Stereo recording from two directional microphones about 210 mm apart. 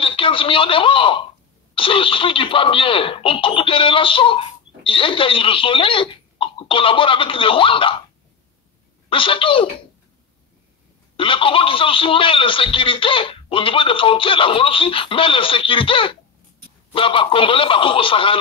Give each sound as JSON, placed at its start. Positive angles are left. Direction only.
{"t": 0.0, "sound": "a woman's voice", "side_deg": 25}
{"t": 9.1, "sound": "speech", "side_deg": 25}
{"t": 11.1, "sound": "speech", "side_deg": 25}